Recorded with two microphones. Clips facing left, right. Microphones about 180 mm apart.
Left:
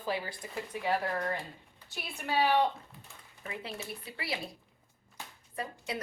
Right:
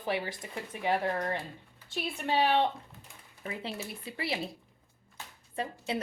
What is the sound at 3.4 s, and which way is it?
Speech, 30° right (ahead or behind).